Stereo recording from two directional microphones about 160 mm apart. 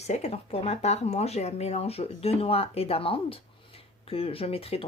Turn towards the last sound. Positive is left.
turn(degrees=40)  # may be behind; listen again after turning